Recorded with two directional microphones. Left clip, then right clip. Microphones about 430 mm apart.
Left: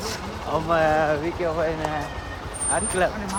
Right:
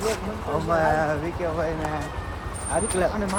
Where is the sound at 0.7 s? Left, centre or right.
Centre.